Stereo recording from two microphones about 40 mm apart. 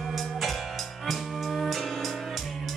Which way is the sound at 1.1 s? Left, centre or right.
Centre.